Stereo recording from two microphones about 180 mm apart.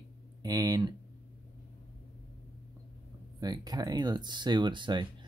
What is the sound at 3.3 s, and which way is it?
Speech, 20° right (ahead or behind).